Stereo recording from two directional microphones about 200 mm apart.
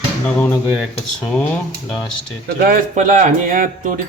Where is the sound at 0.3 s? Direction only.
10° left (ahead or behind).